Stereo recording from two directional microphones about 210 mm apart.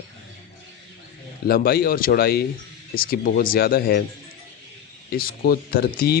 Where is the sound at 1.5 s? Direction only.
45° left (ahead or behind).